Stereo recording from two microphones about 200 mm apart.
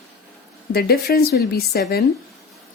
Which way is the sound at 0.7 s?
50° left (ahead or behind).